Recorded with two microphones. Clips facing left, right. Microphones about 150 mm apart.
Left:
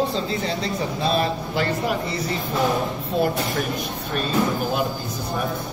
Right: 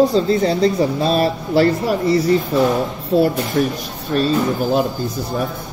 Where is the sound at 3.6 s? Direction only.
30° right (ahead or behind).